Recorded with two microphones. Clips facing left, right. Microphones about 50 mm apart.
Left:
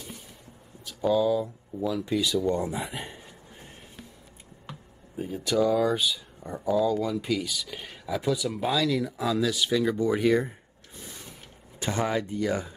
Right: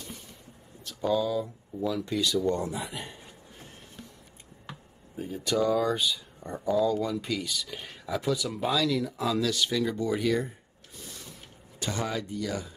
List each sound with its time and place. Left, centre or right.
0.8 s speech: centre
4.6 s speech: centre; by 10.5 s left
11.8 s speech: left